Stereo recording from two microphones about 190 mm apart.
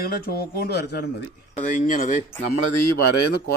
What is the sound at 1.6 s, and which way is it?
Speech, 40° left (ahead or behind).